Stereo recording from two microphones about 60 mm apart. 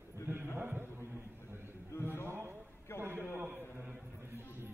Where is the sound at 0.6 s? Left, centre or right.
Right.